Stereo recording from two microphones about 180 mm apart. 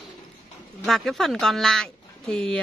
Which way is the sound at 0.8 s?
Centre (ahead or behind).